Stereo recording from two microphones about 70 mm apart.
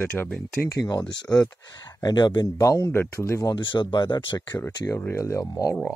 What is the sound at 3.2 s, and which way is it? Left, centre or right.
Speech, left.